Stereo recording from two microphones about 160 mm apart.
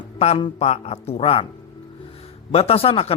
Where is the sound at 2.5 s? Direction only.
40° left (ahead or behind).